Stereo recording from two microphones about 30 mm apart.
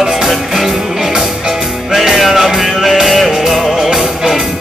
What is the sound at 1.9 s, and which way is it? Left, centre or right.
Music, centre.